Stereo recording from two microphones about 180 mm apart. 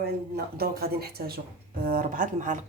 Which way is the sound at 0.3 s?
60° right (ahead or behind).